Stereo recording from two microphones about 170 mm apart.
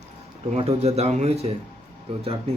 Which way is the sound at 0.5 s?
35° right (ahead or behind).